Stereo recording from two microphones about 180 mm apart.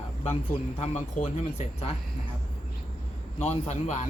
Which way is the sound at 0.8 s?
40° left (ahead or behind).